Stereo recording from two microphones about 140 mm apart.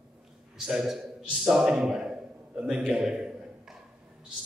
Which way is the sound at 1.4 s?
5° right (ahead or behind).